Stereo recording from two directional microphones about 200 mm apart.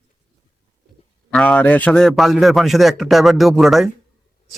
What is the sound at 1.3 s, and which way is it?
A man's voice, 5° left (ahead or behind).